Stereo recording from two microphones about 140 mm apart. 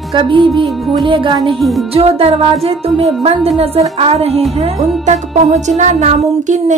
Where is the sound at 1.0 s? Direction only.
40° right (ahead or behind).